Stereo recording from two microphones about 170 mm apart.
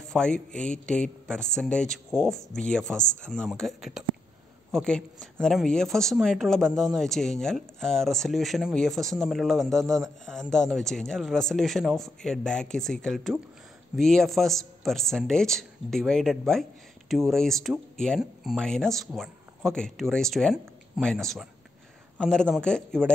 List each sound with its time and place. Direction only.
0.0 s speech: 5° left (ahead or behind)